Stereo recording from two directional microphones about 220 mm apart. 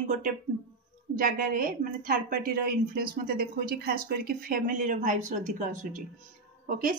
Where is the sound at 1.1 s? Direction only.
40° right (ahead or behind).